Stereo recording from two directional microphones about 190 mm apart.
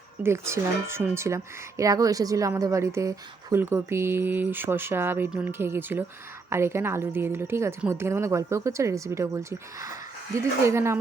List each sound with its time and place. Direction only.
0.2 s speech: 15° right (ahead or behind)